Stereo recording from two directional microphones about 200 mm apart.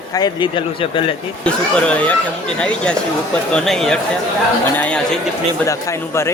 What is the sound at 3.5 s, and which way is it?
Speech, centre (ahead or behind).